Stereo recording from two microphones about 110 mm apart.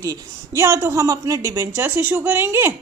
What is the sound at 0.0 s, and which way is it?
A woman's voice, 30° right (ahead or behind).